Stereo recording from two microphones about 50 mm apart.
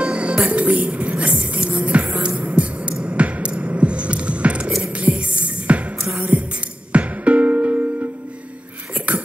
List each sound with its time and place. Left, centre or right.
0.0 s music: right